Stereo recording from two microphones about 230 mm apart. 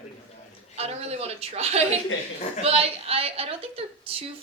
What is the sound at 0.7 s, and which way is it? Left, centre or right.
Speech, right.